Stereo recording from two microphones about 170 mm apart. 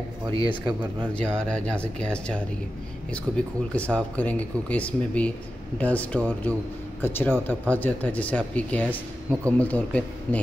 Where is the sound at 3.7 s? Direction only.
10° left (ahead or behind).